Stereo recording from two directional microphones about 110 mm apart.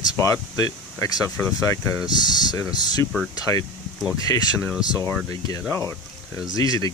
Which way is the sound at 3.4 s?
30° left (ahead or behind).